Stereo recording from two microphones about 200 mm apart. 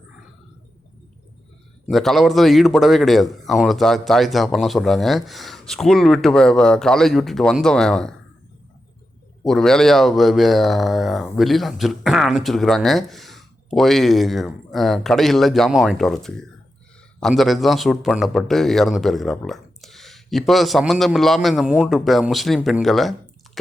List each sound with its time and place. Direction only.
1.9 s speech: centre (ahead or behind)
9.4 s speech: centre (ahead or behind)